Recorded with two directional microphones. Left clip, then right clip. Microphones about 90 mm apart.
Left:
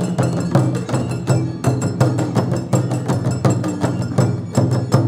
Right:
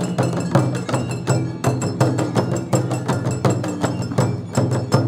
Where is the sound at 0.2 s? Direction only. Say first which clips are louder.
Even; 5° right (ahead or behind).